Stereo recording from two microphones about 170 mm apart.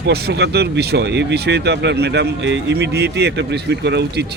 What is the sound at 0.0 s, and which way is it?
Speech, 75° right (ahead or behind).